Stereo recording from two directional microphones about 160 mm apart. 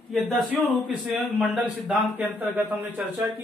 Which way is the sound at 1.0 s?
5° right (ahead or behind).